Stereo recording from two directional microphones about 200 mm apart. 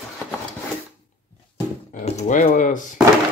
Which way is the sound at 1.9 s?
35° left (ahead or behind).